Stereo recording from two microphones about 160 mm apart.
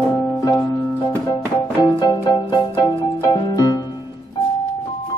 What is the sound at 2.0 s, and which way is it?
Music, 25° left (ahead or behind).